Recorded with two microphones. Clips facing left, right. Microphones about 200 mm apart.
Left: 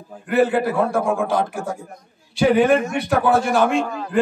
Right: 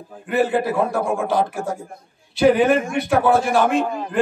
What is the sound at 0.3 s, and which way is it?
Speech, centre (ahead or behind).